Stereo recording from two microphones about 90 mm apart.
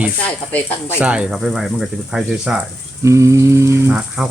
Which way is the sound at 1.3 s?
Centre (ahead or behind).